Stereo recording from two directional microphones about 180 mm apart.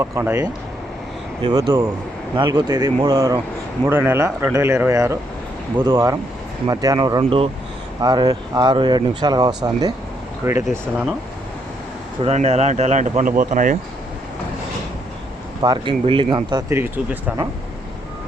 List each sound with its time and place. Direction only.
0.0 s speech: 15° right (ahead or behind)
12.2 s speech: 35° right (ahead or behind)
15.6 s speech: 25° right (ahead or behind); by 17.3 s 10° right (ahead or behind)